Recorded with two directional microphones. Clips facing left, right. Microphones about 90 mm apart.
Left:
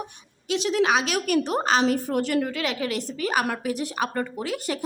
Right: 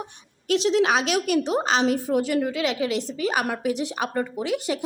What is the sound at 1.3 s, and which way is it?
Speech, 55° left (ahead or behind).